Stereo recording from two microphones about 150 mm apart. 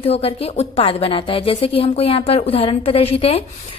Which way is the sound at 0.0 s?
40° left (ahead or behind).